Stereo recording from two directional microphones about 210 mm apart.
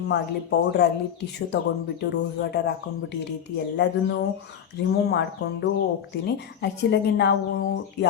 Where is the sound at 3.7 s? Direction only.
55° left (ahead or behind).